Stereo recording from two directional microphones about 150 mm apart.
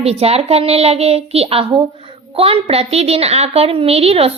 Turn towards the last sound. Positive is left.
turn(degrees=-40)  # may be behind; listen again after turning